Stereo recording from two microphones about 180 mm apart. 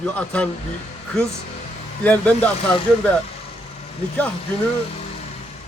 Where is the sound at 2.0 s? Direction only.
10° left (ahead or behind).